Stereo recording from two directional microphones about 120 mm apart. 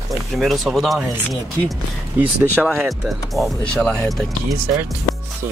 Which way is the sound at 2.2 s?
15° right (ahead or behind).